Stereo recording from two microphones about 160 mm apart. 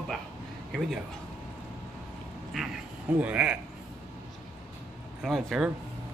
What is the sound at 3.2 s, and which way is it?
Speech, 10° right (ahead or behind).